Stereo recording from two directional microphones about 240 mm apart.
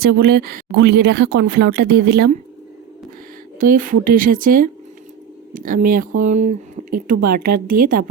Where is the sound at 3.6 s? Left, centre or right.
Right.